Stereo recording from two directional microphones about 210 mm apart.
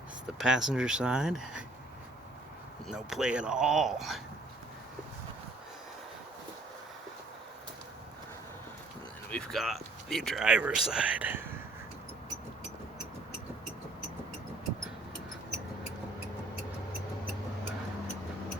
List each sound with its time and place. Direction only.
0.3 s speech: centre (ahead or behind)
2.8 s speech: centre (ahead or behind)
9.3 s speech: centre (ahead or behind)